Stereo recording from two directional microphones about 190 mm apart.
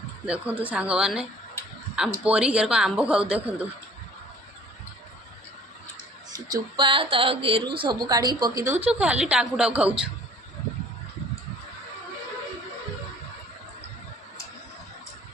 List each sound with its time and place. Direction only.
0.3 s speech: 5° right (ahead or behind)
6.5 s a woman's voice: 25° right (ahead or behind); by 9.9 s 5° right (ahead or behind)